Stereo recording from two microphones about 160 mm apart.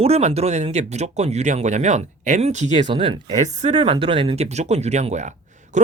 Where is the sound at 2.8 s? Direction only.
35° right (ahead or behind).